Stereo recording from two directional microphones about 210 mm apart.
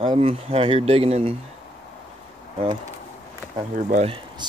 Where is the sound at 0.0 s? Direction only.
25° right (ahead or behind).